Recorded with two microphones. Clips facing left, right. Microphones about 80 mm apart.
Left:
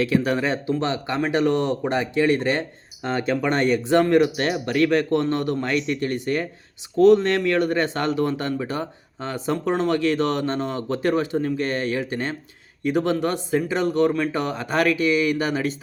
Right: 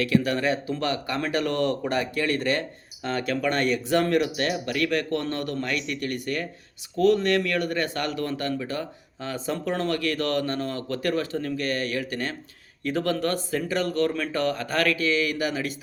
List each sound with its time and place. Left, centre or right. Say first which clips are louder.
0.0 s speech: left 2 dB; left